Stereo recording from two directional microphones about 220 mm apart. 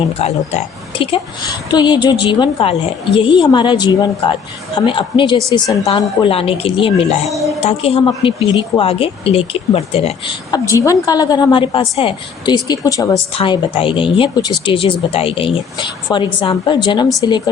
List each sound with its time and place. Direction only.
0.2 s a woman's voice: 30° left (ahead or behind)